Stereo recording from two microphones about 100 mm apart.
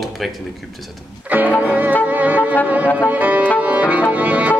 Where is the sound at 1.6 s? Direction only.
15° right (ahead or behind).